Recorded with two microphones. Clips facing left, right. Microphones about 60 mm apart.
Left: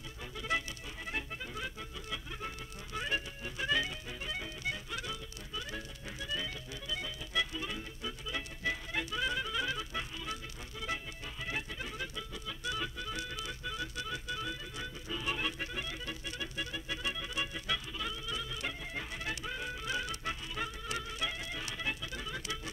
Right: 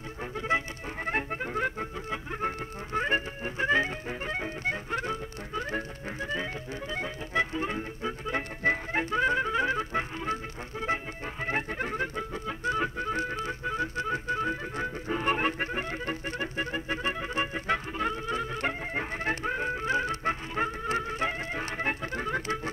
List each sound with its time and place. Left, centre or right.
1.0 s music: right